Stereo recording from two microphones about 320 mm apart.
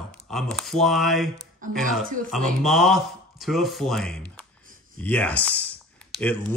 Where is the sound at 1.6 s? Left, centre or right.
Right.